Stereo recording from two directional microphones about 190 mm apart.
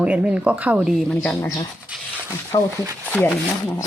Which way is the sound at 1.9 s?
5° right (ahead or behind).